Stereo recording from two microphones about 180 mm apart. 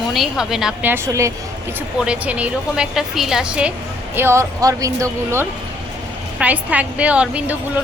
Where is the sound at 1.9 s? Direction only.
5° right (ahead or behind).